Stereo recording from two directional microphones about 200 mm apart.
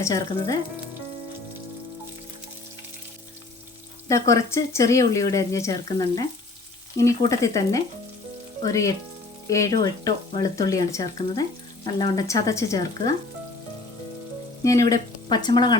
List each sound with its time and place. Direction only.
0.0 s frying: 20° left (ahead or behind)
4.1 s speech: 15° left (ahead or behind)
7.3 s speech: 15° left (ahead or behind)
14.6 s speech: 15° left (ahead or behind)
15.3 s frying: 20° left (ahead or behind)